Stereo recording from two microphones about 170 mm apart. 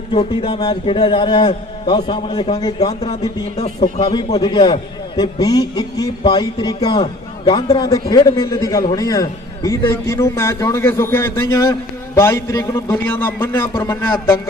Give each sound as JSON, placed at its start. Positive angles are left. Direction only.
{"t": 0.1, "sound": "a man's voice", "side_deg": 30}
{"t": 3.5, "sound": "a man's voice", "side_deg": 40}
{"t": 4.1, "sound": "a man's voice", "side_deg": 25}